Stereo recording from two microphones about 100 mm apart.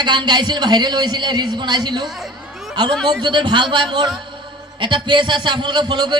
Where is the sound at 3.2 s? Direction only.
50° right (ahead or behind).